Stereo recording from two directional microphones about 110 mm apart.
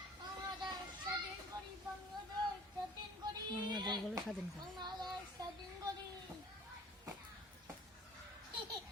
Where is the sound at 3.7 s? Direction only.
40° right (ahead or behind).